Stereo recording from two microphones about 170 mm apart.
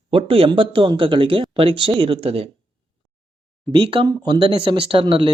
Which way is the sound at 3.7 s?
30° right (ahead or behind).